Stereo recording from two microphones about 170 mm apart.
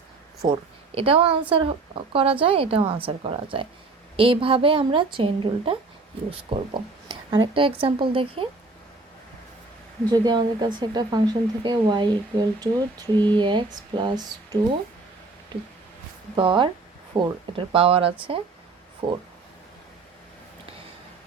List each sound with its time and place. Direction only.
0.4 s a woman's voice: 30° right (ahead or behind)
10.1 s speech: 25° right (ahead or behind)
16.3 s a woman's voice: 30° right (ahead or behind)